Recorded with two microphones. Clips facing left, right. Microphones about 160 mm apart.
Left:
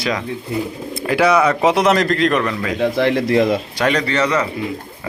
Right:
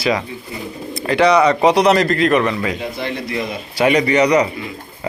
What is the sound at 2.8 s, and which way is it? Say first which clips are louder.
Speech: left 8 dB; 90° left.